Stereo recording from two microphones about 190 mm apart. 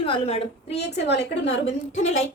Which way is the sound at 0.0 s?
30° left (ahead or behind).